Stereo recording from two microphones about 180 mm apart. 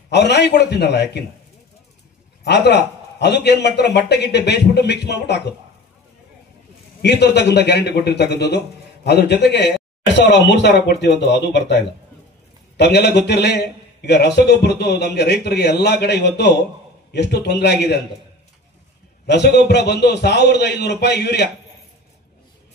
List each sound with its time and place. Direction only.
0.1 s a man's voice: 70° left (ahead or behind)
2.4 s a man's voice: 65° left (ahead or behind)
7.0 s a man's voice: 70° left (ahead or behind)
19.2 s a man's voice: 70° left (ahead or behind)